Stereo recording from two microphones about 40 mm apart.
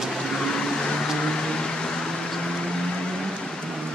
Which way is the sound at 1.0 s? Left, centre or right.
Centre.